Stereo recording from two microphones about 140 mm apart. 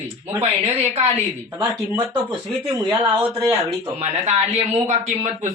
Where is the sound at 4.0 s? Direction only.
50° right (ahead or behind).